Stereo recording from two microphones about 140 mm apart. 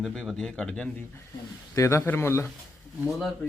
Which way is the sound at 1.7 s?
20° left (ahead or behind).